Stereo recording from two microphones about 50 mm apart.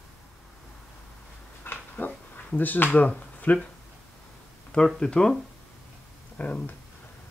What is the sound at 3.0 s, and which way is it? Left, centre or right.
Speech, left.